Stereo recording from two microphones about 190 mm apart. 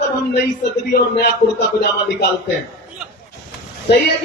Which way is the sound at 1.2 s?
60° left (ahead or behind).